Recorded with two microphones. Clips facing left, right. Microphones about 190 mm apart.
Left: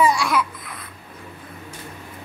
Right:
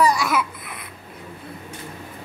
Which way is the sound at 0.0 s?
5° right (ahead or behind).